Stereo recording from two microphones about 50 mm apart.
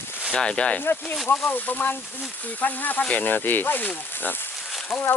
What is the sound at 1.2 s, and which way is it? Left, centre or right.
Speech, left.